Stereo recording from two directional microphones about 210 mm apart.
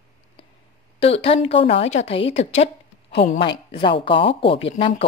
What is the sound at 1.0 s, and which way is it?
A woman's voice, 30° left (ahead or behind).